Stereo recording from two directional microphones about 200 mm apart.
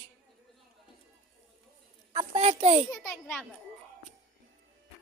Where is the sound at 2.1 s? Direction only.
25° right (ahead or behind).